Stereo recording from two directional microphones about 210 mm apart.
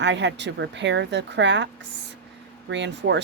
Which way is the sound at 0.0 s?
60° right (ahead or behind).